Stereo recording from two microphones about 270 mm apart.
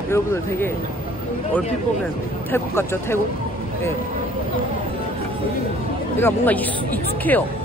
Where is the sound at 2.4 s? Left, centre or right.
Centre.